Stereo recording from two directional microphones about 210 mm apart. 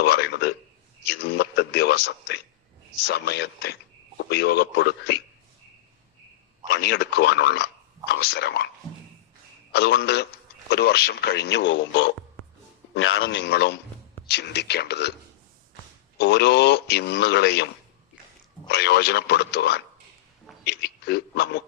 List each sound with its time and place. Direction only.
0.0 s a man's voice: 50° left (ahead or behind)
6.7 s speech: 50° left (ahead or behind)
9.7 s speech: 50° left (ahead or behind)
12.9 s a man's voice: 75° left (ahead or behind); by 15.1 s 55° left (ahead or behind)
16.1 s speech: 50° left (ahead or behind)
18.7 s speech: 50° left (ahead or behind)